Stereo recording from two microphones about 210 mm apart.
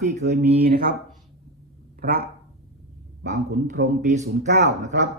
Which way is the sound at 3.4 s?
55° right (ahead or behind).